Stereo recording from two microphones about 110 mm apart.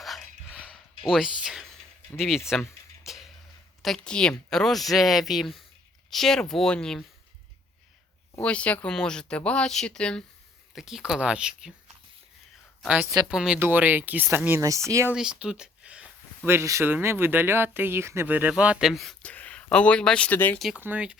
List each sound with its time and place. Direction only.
0.0 s dog: centre (ahead or behind)
1.0 s speech: 5° right (ahead or behind)
2.5 s music: centre (ahead or behind)
3.8 s speech: 5° left (ahead or behind)
8.4 s speech: 10° left (ahead or behind)
10.8 s speech: 5° right (ahead or behind)
13.3 s speech: 5° right (ahead or behind)
13.6 s speech: 15° right (ahead or behind)
15.1 s speech: 5° right (ahead or behind)
16.5 s speech: 25° right (ahead or behind); by 19.1 s centre (ahead or behind)
19.2 s speech: 15° left (ahead or behind)
20.7 s speech: 15° right (ahead or behind)